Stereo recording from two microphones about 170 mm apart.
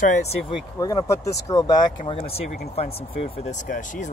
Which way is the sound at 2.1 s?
35° left (ahead or behind).